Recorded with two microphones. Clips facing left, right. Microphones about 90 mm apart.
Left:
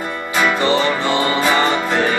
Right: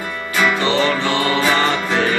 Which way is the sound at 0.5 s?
15° left (ahead or behind).